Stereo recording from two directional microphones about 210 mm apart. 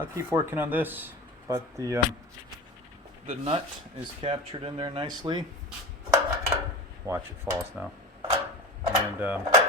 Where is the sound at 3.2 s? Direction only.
30° right (ahead or behind).